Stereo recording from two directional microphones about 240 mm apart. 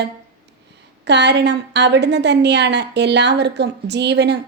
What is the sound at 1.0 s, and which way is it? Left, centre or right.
A woman's voice, right.